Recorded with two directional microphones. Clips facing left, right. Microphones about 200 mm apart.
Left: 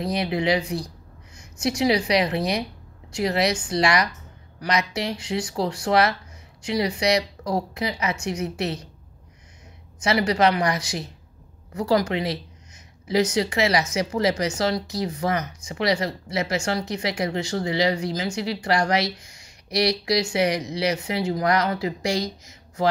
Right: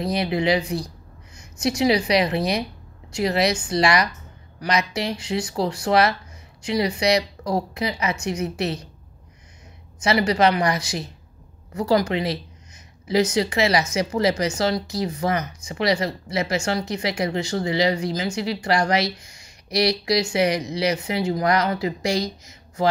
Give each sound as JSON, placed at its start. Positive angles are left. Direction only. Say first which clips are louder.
{"t": 0.0, "sound": "speech", "louder": "right 2 dB", "side_deg": -30}
{"t": 10.0, "sound": "speech", "louder": "right 1 dB", "side_deg": -25}